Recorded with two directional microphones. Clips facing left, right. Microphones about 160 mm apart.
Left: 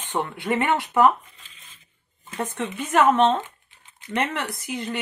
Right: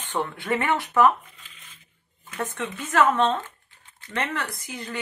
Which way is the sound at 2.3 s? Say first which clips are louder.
Left 2 dB; 25° left (ahead or behind).